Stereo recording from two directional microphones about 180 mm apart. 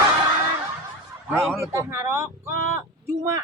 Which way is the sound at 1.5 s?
15° right (ahead or behind).